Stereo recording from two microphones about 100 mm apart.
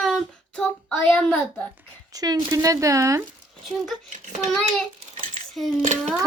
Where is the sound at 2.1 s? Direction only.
40° right (ahead or behind).